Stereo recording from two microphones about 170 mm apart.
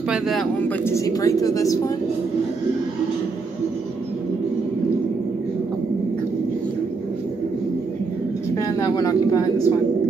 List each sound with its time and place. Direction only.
0.1 s speech: centre (ahead or behind)
0.8 s a woman's voice: 20° left (ahead or behind)
8.5 s speech: 20° left (ahead or behind)